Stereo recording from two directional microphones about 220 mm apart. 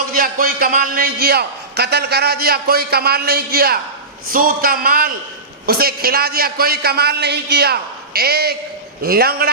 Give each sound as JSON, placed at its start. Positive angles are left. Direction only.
{"t": 0.1, "sound": "a man's voice", "side_deg": -40}